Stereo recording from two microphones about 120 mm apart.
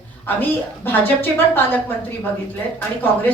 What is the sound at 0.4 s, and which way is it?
A woman's voice, 15° left (ahead or behind).